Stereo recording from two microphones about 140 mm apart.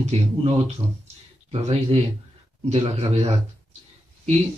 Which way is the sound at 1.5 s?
45° right (ahead or behind).